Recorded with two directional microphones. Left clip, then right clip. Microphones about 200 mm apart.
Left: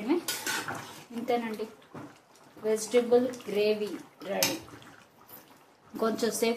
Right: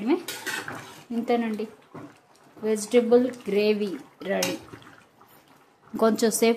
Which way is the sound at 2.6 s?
60° right (ahead or behind).